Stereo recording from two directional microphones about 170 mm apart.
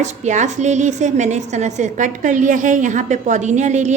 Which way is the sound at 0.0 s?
45° right (ahead or behind).